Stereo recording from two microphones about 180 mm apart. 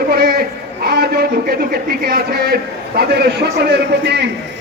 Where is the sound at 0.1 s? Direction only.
60° right (ahead or behind).